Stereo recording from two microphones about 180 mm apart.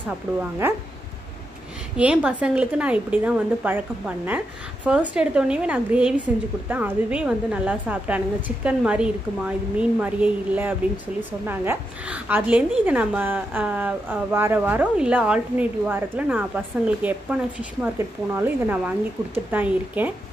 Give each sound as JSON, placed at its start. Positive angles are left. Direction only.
{"t": 0.4, "sound": "a woman's voice", "side_deg": -10}
{"t": 2.0, "sound": "a woman's voice", "side_deg": -5}